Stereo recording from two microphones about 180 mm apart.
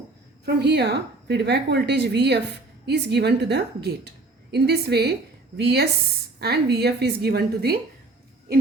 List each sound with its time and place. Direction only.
0.4 s a woman's voice: 70° right (ahead or behind)